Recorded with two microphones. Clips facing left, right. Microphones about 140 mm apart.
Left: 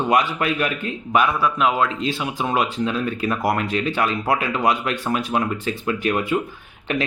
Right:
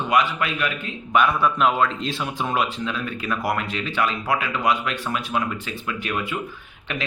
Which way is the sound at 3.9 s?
40° left (ahead or behind).